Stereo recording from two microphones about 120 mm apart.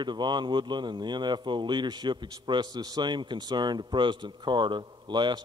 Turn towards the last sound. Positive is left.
turn(degrees=-40)  # may be behind; listen again after turning